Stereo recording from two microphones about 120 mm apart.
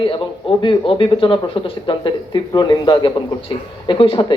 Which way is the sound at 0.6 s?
45° left (ahead or behind).